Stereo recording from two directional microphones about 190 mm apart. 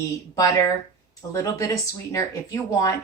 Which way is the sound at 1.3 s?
15° left (ahead or behind).